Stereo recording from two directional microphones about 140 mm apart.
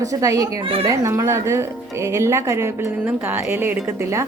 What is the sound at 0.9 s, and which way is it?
A woman's voice, 20° right (ahead or behind).